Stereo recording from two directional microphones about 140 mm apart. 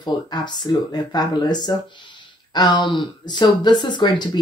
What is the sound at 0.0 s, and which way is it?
Speech, 30° left (ahead or behind).